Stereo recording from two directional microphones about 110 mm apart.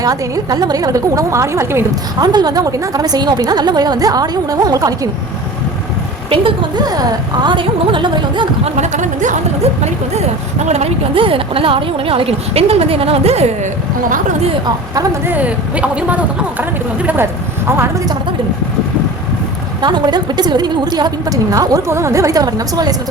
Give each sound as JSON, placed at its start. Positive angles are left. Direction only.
{"t": 0.0, "sound": "a woman's voice", "side_deg": -35}
{"t": 2.2, "sound": "a woman's voice", "side_deg": -40}
{"t": 6.3, "sound": "a woman's voice", "side_deg": -50}
{"t": 8.6, "sound": "a woman's voice", "side_deg": -90}
{"t": 10.7, "sound": "speech", "side_deg": -75}
{"t": 15.3, "sound": "speech", "side_deg": -10}
{"t": 19.8, "sound": "a woman's voice", "side_deg": -40}